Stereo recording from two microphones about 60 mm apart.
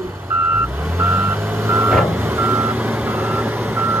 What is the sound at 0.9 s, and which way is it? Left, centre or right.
Reversing beeps, right.